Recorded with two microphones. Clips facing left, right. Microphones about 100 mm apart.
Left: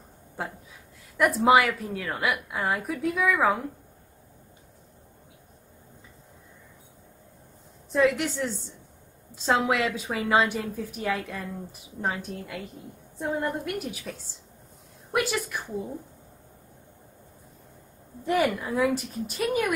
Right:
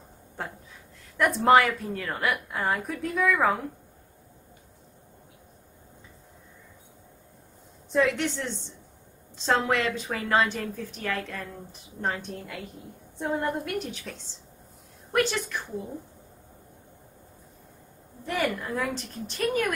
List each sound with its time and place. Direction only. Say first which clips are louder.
1.1 s a woman's voice: even; 5° left (ahead or behind)
7.9 s a woman's voice: left 1 dB; 5° left (ahead or behind)
18.2 s a woman's voice: left 4 dB; 15° left (ahead or behind)
18.6 s a woman's voice: left 5 dB; 5° left (ahead or behind)